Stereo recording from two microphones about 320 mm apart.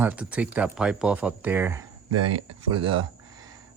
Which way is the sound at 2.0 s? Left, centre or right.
Right.